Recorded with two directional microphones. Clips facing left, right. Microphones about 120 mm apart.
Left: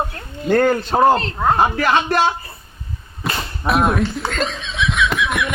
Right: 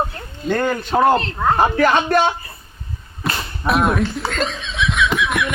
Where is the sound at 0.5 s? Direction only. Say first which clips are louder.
Left 5 dB; 45° left (ahead or behind).